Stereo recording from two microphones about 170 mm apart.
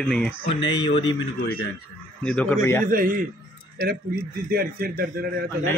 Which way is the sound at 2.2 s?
10° left (ahead or behind).